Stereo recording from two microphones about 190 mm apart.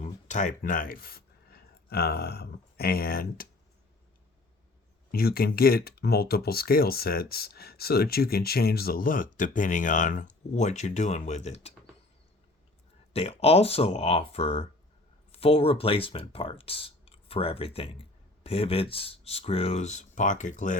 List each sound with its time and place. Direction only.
0.0 s speech: 40° left (ahead or behind)
5.1 s speech: 50° left (ahead or behind); by 11.7 s 35° left (ahead or behind)
13.1 s speech: 30° left (ahead or behind)